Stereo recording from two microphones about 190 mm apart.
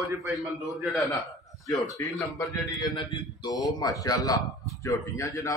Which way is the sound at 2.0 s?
15° left (ahead or behind).